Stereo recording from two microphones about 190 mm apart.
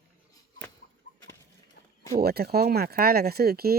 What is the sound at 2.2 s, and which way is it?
Speech, 55° right (ahead or behind).